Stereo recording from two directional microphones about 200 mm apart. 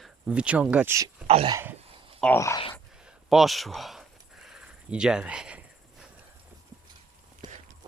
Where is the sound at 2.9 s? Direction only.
5° right (ahead or behind).